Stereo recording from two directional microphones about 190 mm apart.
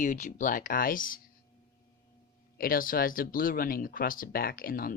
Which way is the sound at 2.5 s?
50° left (ahead or behind).